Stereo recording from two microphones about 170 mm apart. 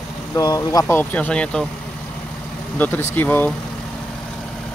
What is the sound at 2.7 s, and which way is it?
Speech, 10° left (ahead or behind).